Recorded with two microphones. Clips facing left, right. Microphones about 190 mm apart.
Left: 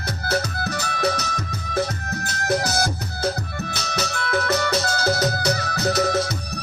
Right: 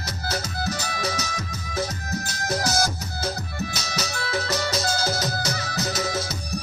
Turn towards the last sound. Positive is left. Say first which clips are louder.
# left 6 dB
turn(degrees=60)  # may be behind; listen again after turning